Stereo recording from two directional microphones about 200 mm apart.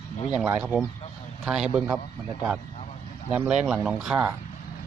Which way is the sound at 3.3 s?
5° right (ahead or behind).